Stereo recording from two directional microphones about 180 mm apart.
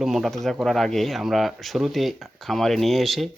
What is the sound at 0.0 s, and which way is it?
Speech, centre (ahead or behind).